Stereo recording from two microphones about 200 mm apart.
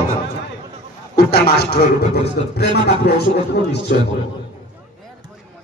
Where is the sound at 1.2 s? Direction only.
50° left (ahead or behind).